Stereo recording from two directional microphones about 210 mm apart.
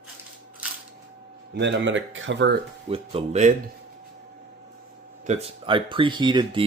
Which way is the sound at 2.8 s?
25° right (ahead or behind).